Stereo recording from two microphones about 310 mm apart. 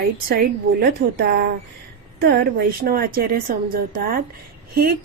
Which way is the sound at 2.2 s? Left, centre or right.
Right.